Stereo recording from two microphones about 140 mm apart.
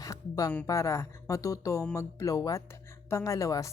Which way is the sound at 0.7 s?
20° left (ahead or behind).